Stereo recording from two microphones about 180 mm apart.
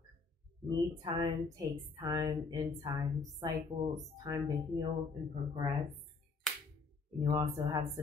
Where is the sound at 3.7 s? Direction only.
45° right (ahead or behind).